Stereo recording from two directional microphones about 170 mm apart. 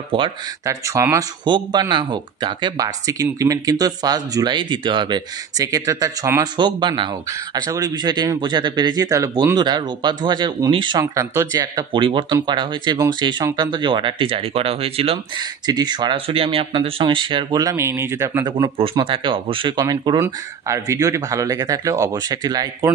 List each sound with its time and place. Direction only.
0.1 s speech: 30° right (ahead or behind)
0.7 s speech: 15° right (ahead or behind)